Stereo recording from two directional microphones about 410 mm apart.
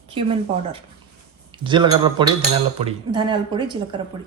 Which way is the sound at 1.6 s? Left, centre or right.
Centre.